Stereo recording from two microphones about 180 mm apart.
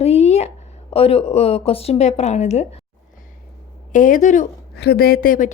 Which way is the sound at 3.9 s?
45° left (ahead or behind).